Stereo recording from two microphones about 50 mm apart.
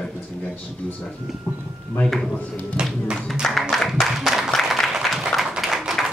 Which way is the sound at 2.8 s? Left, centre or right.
Centre.